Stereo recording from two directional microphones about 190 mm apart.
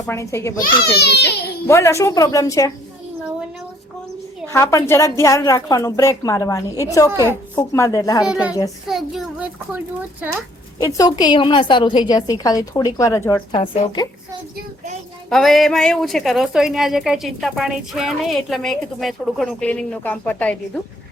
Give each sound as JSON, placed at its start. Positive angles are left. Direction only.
{"t": 0.0, "sound": "a woman's voice", "side_deg": 15}
{"t": 0.9, "sound": "a child's voice", "side_deg": 60}
{"t": 1.6, "sound": "a woman's voice", "side_deg": 15}
{"t": 4.4, "sound": "a woman's voice", "side_deg": 15}
{"t": 7.1, "sound": "a woman's voice", "side_deg": -15}
{"t": 7.5, "sound": "a woman's voice", "side_deg": 15}
{"t": 8.2, "sound": "a woman's voice", "side_deg": -5}
{"t": 10.8, "sound": "a woman's voice", "side_deg": 15}
{"t": 13.5, "sound": "a woman's voice", "side_deg": 25}
{"t": 15.3, "sound": "a woman's voice", "side_deg": 0}